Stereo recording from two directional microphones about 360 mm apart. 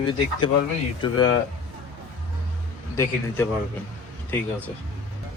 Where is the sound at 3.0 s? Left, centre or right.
Centre.